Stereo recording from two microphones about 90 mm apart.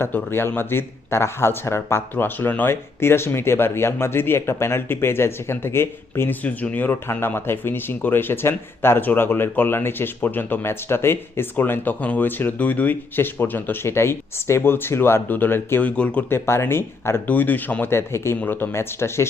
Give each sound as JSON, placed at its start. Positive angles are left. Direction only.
{"t": 0.0, "sound": "speech", "side_deg": 25}
{"t": 16.3, "sound": "speech", "side_deg": 25}